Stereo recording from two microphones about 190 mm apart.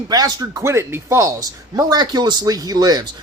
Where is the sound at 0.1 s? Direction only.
20° right (ahead or behind).